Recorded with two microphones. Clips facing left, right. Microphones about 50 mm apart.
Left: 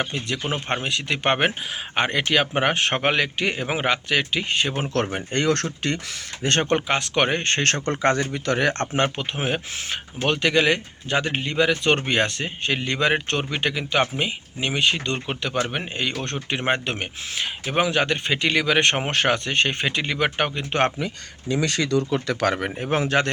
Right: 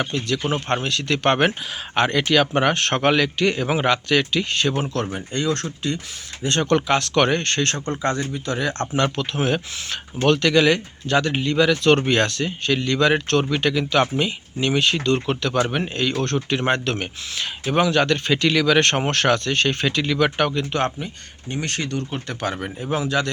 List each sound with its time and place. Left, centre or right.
0.0 s speech: left
5.1 s speech: left
6.4 s speech: left
6.7 s speech: centre
7.6 s speech: left
9.0 s speech: left
9.3 s speech: centre
12.3 s speech: left
21.0 s speech: left